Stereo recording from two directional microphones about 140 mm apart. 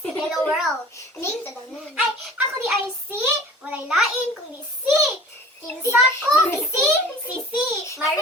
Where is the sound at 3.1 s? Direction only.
15° right (ahead or behind).